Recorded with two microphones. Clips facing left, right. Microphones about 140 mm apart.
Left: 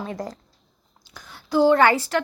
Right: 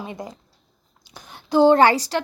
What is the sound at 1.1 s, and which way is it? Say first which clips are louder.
A woman's voice: right 3 dB; 20° right (ahead or behind).